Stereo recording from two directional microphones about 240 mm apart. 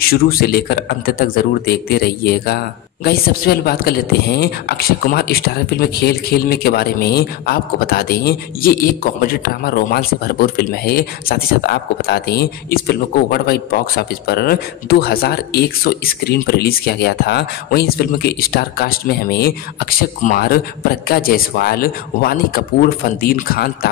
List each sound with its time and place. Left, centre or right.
0.0 s speech: left